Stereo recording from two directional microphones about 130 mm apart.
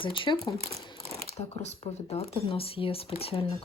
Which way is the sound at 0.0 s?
40° left (ahead or behind).